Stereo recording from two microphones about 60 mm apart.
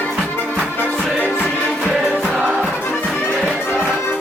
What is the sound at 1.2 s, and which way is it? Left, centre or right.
Music, left.